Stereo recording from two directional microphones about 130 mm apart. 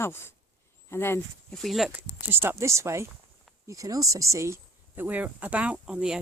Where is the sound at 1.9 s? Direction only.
15° right (ahead or behind).